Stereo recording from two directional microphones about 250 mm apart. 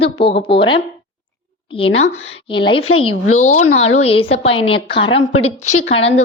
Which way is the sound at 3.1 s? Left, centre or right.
Left.